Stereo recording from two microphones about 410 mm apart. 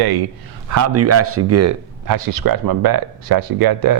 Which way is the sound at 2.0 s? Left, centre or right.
Right.